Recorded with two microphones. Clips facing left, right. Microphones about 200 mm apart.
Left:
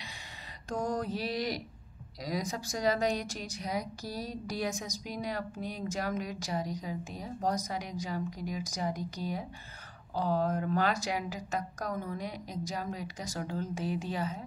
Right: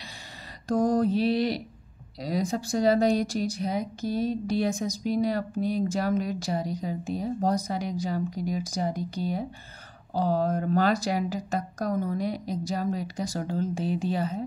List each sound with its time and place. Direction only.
0.7 s a woman's voice: 35° right (ahead or behind)